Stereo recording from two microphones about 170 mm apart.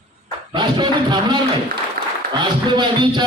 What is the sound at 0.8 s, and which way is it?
Speech, 25° right (ahead or behind).